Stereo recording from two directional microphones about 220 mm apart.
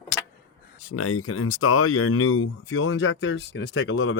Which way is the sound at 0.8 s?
75° left (ahead or behind).